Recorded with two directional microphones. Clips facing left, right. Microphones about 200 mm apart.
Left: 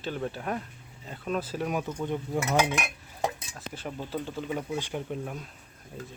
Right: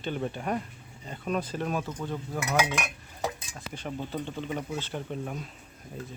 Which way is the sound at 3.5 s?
5° left (ahead or behind).